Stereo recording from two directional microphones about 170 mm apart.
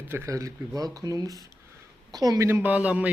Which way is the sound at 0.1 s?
15° right (ahead or behind).